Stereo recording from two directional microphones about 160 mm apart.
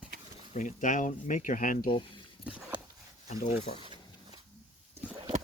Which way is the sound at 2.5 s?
10° right (ahead or behind).